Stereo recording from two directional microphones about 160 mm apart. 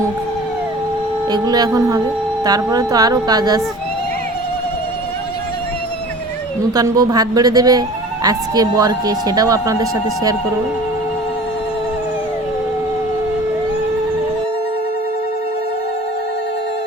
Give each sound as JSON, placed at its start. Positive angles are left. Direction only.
{"t": 1.3, "sound": "speech", "side_deg": -25}
{"t": 6.7, "sound": "speech", "side_deg": -25}